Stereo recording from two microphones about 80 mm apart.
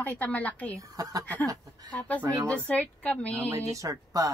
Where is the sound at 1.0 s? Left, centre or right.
Right.